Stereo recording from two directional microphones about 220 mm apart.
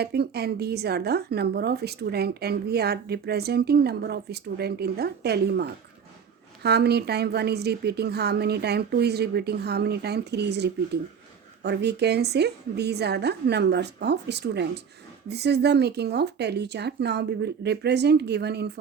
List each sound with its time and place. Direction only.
0.0 s a woman's voice: 45° right (ahead or behind)